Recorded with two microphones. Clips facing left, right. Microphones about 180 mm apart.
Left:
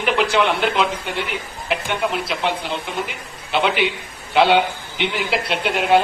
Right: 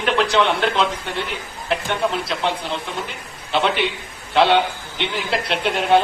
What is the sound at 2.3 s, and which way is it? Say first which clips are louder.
Speech: even; 5° left (ahead or behind).